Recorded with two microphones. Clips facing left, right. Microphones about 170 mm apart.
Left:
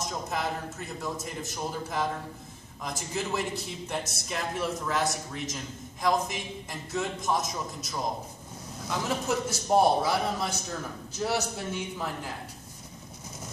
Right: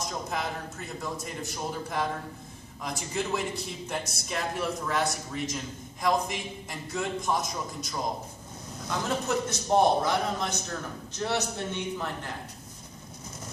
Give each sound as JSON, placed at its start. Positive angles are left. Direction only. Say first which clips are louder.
{"t": 0.0, "sound": "a man's voice", "louder": "left 1 dB", "side_deg": 0}